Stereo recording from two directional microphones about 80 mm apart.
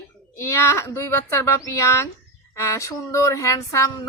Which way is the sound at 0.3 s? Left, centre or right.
Left.